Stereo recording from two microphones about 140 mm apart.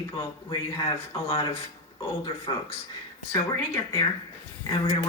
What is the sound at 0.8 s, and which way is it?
Speech, 40° left (ahead or behind).